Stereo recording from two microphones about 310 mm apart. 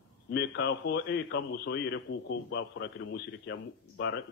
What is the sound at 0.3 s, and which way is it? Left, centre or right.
A man's voice, left.